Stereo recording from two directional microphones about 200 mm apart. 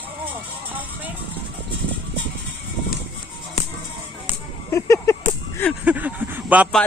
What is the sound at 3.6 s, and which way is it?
Music, 30° left (ahead or behind).